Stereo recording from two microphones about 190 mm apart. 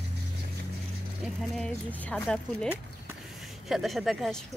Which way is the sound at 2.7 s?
5° right (ahead or behind).